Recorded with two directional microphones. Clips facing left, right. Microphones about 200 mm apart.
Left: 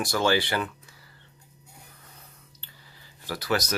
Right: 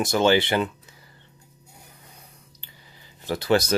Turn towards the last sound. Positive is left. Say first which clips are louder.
# right 6 dB
turn(degrees=-30)  # may be behind; listen again after turning